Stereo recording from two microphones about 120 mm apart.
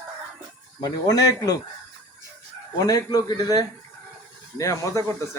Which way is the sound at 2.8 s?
30° left (ahead or behind).